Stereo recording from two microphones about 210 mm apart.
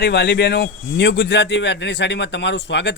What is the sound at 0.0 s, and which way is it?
A man's voice, 55° left (ahead or behind).